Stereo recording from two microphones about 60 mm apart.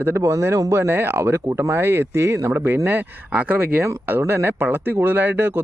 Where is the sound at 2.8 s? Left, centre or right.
Right.